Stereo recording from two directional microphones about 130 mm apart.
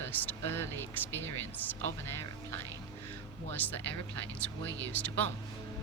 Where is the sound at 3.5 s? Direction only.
15° left (ahead or behind).